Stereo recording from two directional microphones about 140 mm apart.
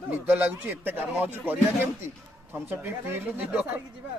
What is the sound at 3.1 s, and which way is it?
Speech, 15° right (ahead or behind).